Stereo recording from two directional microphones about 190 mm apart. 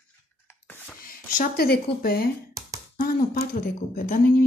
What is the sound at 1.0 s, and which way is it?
A woman's voice, 50° left (ahead or behind).